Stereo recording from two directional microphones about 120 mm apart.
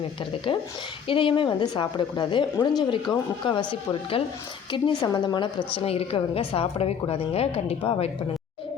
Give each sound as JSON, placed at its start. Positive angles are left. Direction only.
{"t": 1.0, "sound": "a woman's voice", "side_deg": 45}